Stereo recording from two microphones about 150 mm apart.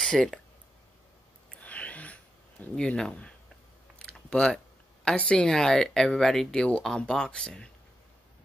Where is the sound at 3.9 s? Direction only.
5° left (ahead or behind).